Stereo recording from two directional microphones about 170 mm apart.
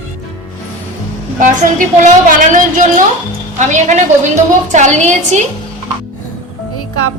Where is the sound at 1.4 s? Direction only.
50° right (ahead or behind).